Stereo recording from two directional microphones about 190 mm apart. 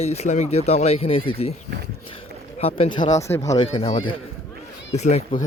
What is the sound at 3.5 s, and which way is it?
Speech, 25° left (ahead or behind).